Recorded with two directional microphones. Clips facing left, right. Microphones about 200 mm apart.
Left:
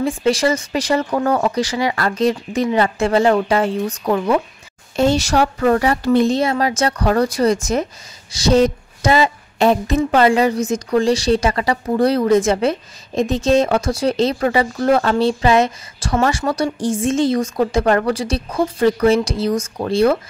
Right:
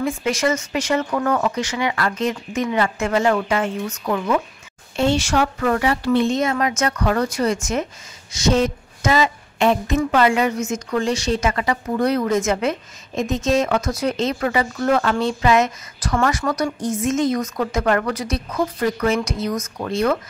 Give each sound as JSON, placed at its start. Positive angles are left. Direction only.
{"t": 0.0, "sound": "speech", "side_deg": 30}